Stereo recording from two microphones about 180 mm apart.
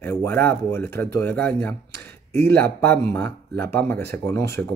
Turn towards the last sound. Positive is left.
turn(degrees=15)  # may be behind; listen again after turning